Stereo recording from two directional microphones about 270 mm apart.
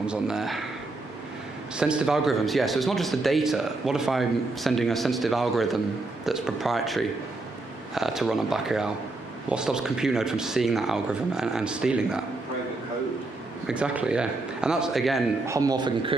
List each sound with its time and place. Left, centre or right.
0.0 s speech: centre
1.8 s speech: centre
13.7 s speech: centre
15.4 s a man's voice: centre